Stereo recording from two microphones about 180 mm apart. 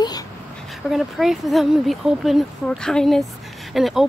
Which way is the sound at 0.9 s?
Centre (ahead or behind).